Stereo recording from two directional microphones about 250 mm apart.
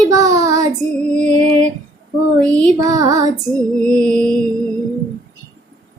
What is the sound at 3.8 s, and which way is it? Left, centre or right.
Music, centre.